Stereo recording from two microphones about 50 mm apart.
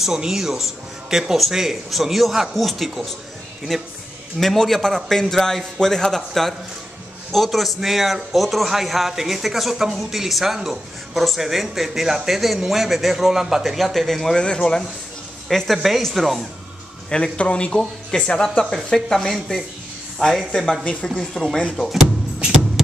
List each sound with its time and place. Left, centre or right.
0.0 s a man's voice: centre
14.4 s a man's voice: centre
15.4 s a man's voice: centre
17.1 s a man's voice: centre
20.8 s speech: left
21.1 s a man's voice: centre
22.4 s vehicle: centre